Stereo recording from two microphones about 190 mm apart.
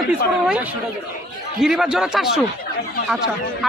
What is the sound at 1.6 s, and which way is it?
Speech, centre (ahead or behind).